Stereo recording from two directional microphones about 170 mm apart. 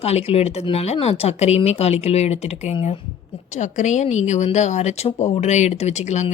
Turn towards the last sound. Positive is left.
turn(degrees=40)  # may be behind; listen again after turning